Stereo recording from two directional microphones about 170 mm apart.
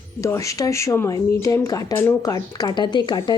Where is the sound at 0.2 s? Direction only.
20° left (ahead or behind).